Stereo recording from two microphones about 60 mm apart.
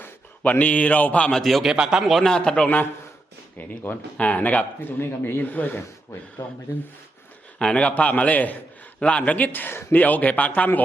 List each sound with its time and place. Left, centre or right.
0.0 s a man's voice: left
1.3 s a man's voice: centre
1.7 s speech: centre
2.2 s a man's voice: centre
3.6 s speech: left
6.4 s speech: left
7.6 s speech: centre